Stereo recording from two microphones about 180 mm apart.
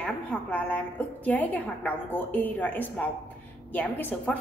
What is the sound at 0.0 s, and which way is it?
A woman's voice, 10° left (ahead or behind).